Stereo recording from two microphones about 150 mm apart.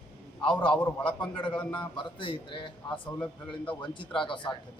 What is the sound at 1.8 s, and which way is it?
A man's voice, 35° left (ahead or behind).